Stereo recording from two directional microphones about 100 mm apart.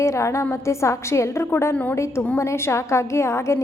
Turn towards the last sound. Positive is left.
turn(degrees=30)  # may be behind; listen again after turning